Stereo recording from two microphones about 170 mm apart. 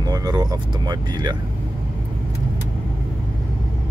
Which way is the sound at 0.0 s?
20° right (ahead or behind).